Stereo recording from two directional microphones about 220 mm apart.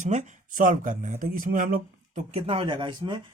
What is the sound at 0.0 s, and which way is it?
Speech, 30° right (ahead or behind).